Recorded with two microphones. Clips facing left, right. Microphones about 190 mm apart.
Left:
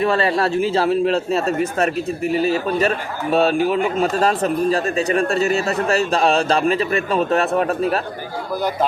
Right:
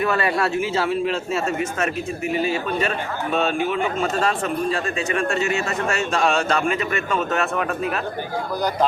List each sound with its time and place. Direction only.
0.0 s speech: 30° left (ahead or behind)